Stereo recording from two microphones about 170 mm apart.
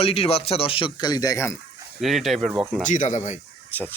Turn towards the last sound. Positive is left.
turn(degrees=10)  # may be behind; listen again after turning